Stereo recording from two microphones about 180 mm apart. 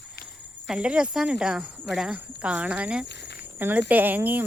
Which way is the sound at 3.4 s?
10° right (ahead or behind).